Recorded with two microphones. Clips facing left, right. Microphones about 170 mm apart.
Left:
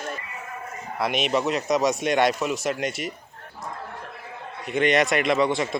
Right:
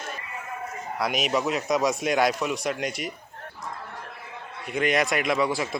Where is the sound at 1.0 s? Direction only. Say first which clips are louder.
Left 2 dB; centre (ahead or behind).